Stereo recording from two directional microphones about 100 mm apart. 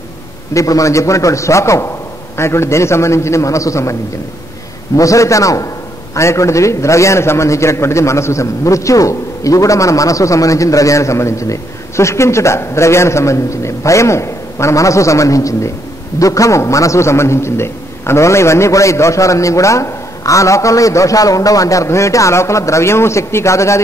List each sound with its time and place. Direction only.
0.5 s a man's voice: 35° left (ahead or behind)
4.9 s a man's voice: 35° left (ahead or behind)